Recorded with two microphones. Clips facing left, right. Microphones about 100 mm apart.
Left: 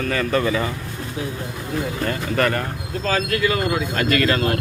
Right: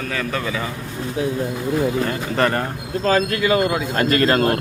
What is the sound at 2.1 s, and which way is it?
Speech, 25° right (ahead or behind).